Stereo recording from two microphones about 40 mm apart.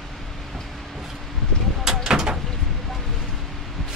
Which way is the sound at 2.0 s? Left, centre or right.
Centre.